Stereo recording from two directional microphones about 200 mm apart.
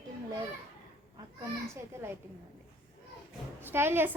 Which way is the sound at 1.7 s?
15° right (ahead or behind).